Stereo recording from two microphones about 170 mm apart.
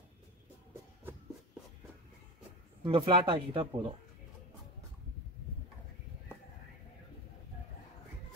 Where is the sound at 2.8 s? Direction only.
30° right (ahead or behind).